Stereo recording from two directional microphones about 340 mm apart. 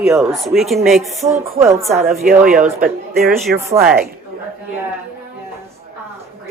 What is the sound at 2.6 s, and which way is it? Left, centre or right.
Speech, right.